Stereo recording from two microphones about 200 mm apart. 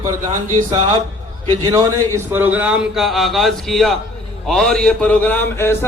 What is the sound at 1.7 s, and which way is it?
A man's voice, 15° right (ahead or behind).